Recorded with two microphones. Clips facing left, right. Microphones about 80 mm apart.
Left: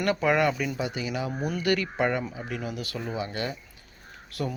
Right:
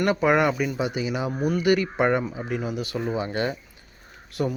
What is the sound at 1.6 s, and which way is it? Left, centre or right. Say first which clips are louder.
Speech: right 4 dB; centre.